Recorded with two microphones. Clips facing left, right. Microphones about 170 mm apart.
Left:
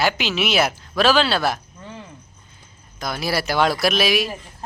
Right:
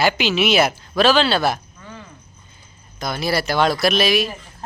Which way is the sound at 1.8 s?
25° left (ahead or behind).